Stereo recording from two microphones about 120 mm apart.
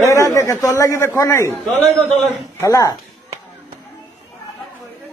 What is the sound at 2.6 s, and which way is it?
Speech, 30° left (ahead or behind).